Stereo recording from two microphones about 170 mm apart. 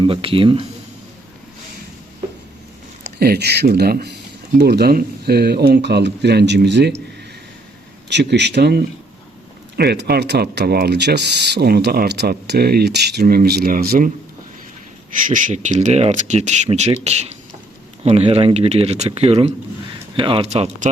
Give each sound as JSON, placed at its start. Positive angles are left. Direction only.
{"t": 0.0, "sound": "speech", "side_deg": -30}
{"t": 3.0, "sound": "speech", "side_deg": -70}
{"t": 8.1, "sound": "speech", "side_deg": -90}
{"t": 9.7, "sound": "speech", "side_deg": -70}
{"t": 15.3, "sound": "speech", "side_deg": -50}